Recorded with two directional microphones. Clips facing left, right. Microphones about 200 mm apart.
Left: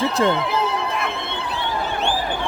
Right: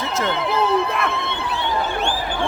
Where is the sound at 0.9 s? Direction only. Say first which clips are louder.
Right 2 dB; 65° right (ahead or behind).